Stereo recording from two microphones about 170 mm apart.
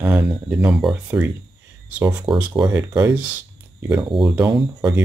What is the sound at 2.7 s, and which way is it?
Speech, 15° right (ahead or behind).